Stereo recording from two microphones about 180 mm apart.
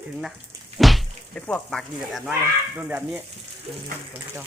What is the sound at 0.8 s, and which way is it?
A woman's voice, centre (ahead or behind).